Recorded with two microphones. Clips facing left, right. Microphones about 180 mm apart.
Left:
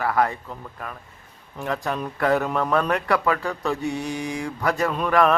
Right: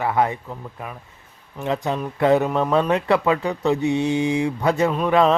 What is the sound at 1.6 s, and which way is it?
Speech, 20° right (ahead or behind).